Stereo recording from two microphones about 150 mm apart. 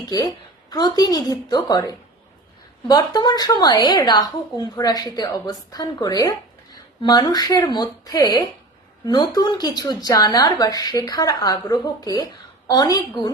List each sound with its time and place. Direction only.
0.0 s a woman's voice: 25° left (ahead or behind)